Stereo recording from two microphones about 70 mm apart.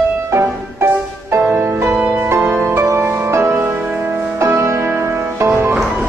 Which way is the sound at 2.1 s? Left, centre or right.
Right.